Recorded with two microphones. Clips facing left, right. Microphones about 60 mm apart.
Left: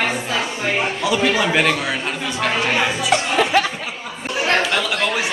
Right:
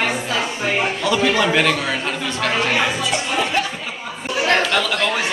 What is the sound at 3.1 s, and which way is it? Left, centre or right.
Music, left.